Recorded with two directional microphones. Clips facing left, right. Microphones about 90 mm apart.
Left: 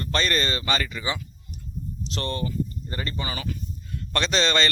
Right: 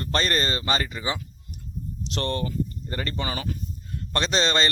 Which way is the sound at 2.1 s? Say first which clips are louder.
Right 1 dB; 50° right (ahead or behind).